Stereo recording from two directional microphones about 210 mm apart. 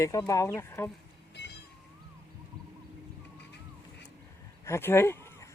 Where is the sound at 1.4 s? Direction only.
50° left (ahead or behind).